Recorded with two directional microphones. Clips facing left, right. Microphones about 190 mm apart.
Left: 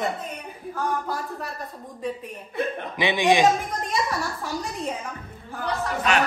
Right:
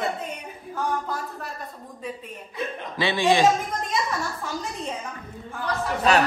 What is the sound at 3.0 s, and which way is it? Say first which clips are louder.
Speech: even; 15° left (ahead or behind).